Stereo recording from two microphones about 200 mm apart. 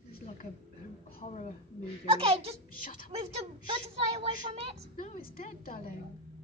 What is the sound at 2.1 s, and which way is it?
Speech, 30° right (ahead or behind).